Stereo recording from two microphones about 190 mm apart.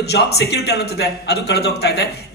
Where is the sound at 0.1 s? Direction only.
60° left (ahead or behind).